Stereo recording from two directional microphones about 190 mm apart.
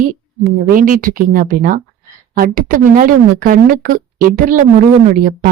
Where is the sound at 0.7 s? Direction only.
45° right (ahead or behind).